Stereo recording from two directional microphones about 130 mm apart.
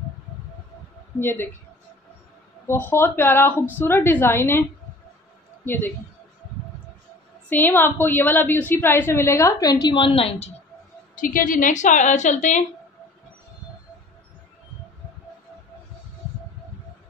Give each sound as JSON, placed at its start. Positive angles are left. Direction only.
{"t": 1.2, "sound": "a woman's voice", "side_deg": 20}
{"t": 2.6, "sound": "a woman's voice", "side_deg": 15}
{"t": 5.7, "sound": "a woman's voice", "side_deg": 15}
{"t": 7.4, "sound": "a woman's voice", "side_deg": 15}
{"t": 11.1, "sound": "a woman's voice", "side_deg": 90}